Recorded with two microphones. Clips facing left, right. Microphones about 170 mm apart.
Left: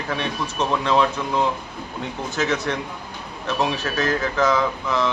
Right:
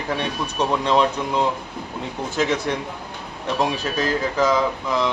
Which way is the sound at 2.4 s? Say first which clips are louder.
Right 1 dB; 15° right (ahead or behind).